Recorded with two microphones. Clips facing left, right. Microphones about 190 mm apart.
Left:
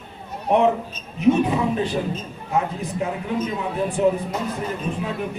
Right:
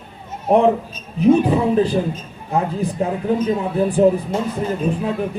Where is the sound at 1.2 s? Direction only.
35° right (ahead or behind).